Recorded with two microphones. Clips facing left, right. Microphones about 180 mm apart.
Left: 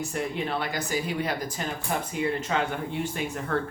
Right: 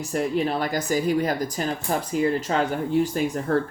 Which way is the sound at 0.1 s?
40° right (ahead or behind).